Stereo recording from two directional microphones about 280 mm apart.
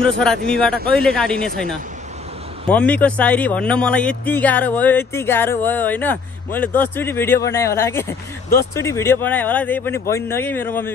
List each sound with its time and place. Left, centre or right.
0.0 s speech: centre
2.7 s a man's voice: centre